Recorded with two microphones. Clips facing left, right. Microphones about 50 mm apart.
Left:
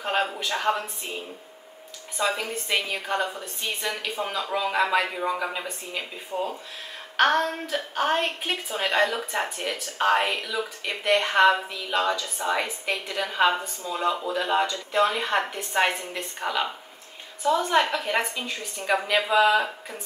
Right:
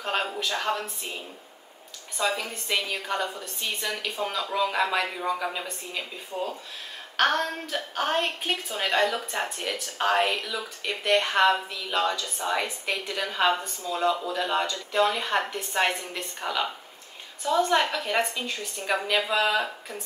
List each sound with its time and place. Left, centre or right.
0.0 s a woman's voice: centre